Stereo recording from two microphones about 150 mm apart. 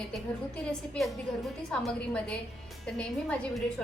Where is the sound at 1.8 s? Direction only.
5° left (ahead or behind).